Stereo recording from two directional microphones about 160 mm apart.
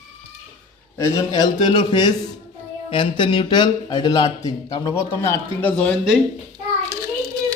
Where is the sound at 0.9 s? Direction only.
20° left (ahead or behind).